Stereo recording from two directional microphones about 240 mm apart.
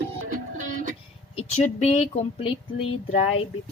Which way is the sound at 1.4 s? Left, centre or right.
Left.